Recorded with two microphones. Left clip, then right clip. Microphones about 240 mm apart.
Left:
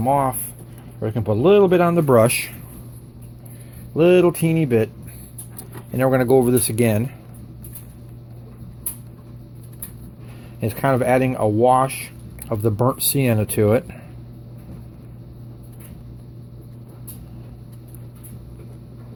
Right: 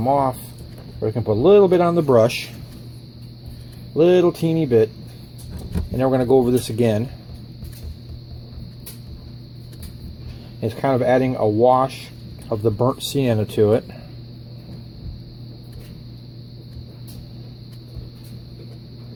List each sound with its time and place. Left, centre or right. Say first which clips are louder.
0.0 s speech: even; left
2.1 s speech: even; left
3.9 s speech: even; left
5.9 s speech: even; left
10.6 s speech: even; left